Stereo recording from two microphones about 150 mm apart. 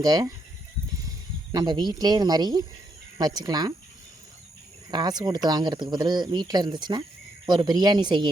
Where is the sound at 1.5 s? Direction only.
30° right (ahead or behind).